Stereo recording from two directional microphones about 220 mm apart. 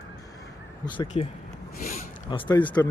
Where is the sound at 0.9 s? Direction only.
25° left (ahead or behind).